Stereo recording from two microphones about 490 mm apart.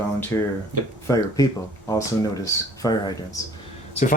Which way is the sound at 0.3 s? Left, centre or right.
Centre.